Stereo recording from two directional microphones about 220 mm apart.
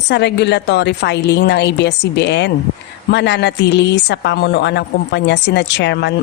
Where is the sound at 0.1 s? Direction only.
50° left (ahead or behind).